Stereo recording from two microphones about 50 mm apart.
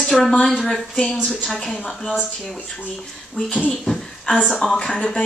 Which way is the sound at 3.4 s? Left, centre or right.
Left.